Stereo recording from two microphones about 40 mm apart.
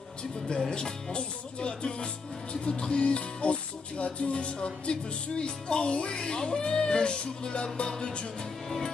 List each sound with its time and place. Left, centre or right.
0.7 s speech: left
8.6 s music: centre